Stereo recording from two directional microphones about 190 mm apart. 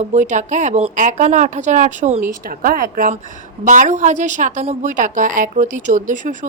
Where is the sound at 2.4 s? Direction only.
50° right (ahead or behind).